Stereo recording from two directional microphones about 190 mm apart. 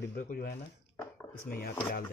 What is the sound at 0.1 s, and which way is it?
Speech, 50° left (ahead or behind).